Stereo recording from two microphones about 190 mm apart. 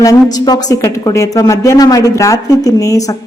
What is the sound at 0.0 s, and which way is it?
A woman's voice, 20° left (ahead or behind).